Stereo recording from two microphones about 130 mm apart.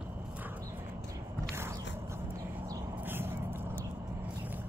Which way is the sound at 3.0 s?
15° right (ahead or behind).